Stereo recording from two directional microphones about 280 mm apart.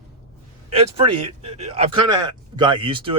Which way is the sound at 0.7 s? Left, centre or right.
Right.